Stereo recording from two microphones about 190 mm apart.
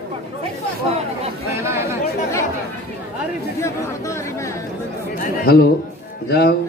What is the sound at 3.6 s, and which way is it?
Speech, 15° left (ahead or behind).